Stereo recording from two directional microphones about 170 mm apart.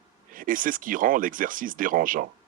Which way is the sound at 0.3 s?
55° right (ahead or behind).